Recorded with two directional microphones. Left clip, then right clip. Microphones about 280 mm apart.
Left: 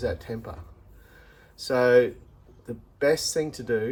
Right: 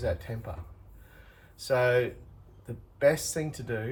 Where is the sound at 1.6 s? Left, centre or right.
Centre.